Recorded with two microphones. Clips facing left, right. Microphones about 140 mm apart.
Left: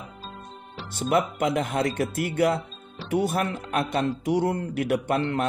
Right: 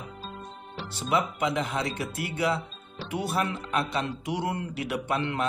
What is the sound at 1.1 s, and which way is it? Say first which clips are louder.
A man's voice: left 3 dB; 50° left (ahead or behind).